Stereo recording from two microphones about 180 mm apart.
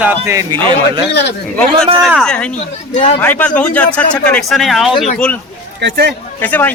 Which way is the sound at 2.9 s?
35° left (ahead or behind).